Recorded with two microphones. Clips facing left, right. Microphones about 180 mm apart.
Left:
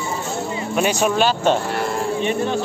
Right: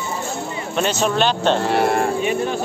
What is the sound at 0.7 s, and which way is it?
Speech, 10° left (ahead or behind).